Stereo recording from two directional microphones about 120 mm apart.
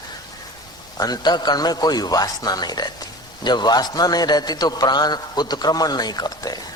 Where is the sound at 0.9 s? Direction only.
35° left (ahead or behind).